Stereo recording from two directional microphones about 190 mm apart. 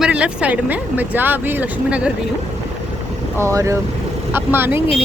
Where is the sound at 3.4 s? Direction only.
15° right (ahead or behind).